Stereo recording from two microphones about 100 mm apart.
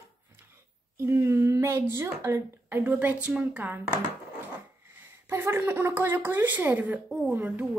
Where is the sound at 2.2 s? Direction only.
25° right (ahead or behind).